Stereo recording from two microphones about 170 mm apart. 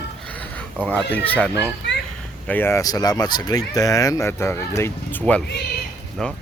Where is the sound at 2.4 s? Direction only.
10° left (ahead or behind).